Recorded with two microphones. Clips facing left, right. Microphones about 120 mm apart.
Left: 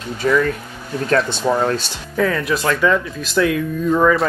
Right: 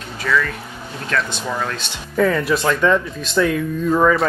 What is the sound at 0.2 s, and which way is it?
Speech, 30° left (ahead or behind).